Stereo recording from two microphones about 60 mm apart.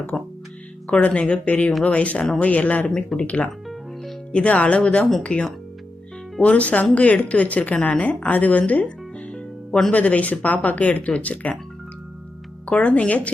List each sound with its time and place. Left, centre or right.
0.1 s speech: centre
1.3 s a woman's voice: left
9.3 s music: centre
9.9 s a woman's voice: left
12.6 s a woman's voice: left